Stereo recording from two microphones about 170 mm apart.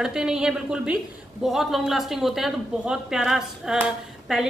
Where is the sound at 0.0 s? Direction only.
5° right (ahead or behind).